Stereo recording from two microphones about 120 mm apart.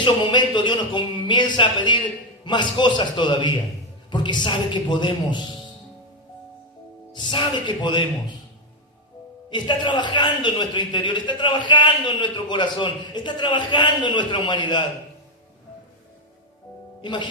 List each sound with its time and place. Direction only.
0.0 s a man's voice: 40° left (ahead or behind)
7.1 s a man's voice: 40° left (ahead or behind)
9.5 s a man's voice: 40° left (ahead or behind)
17.0 s speech: 40° left (ahead or behind)